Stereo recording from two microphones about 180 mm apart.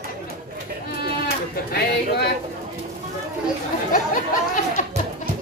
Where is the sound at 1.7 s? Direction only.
60° left (ahead or behind).